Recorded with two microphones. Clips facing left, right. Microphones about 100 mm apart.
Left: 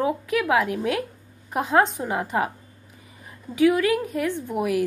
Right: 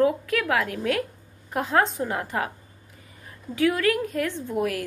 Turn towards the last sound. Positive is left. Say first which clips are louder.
# left 3 dB
turn(degrees=15)  # may be behind; listen again after turning